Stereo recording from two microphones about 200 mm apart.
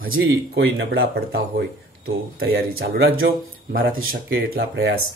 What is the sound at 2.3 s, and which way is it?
Speech, 50° right (ahead or behind).